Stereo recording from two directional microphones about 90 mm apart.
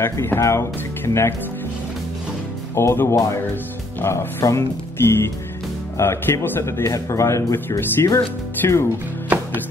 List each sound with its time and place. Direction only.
0.0 s speech: 25° left (ahead or behind)
2.7 s speech: 30° left (ahead or behind)